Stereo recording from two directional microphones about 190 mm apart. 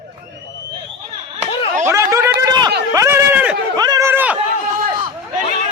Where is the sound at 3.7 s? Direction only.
20° right (ahead or behind).